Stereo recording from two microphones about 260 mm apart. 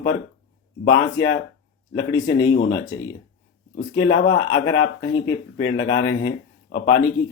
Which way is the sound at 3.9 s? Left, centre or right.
Left.